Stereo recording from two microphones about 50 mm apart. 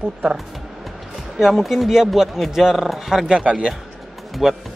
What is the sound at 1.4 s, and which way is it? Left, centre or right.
Speech, centre.